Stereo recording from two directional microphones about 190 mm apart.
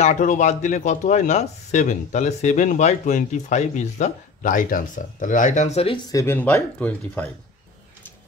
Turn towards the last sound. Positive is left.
turn(degrees=10)  # may be behind; listen again after turning